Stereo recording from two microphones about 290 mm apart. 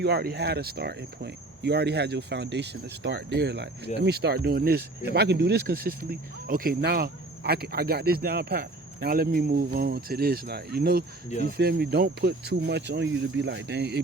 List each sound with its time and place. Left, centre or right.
0.0 s speech: right